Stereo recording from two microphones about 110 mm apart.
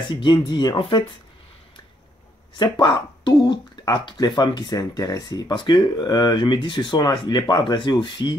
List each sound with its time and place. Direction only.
0.2 s speech: 40° left (ahead or behind)
0.7 s speech: 50° left (ahead or behind)
2.5 s speech: 40° left (ahead or behind)